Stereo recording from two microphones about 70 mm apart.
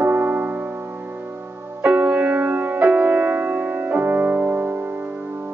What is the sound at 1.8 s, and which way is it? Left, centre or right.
Music, right.